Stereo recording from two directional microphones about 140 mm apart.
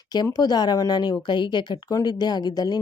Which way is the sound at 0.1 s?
30° left (ahead or behind).